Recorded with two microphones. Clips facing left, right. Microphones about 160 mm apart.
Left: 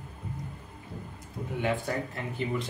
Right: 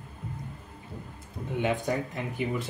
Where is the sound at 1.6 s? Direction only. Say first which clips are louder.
Right 2 dB; 20° right (ahead or behind).